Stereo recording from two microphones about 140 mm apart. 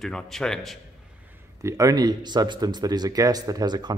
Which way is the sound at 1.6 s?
25° right (ahead or behind).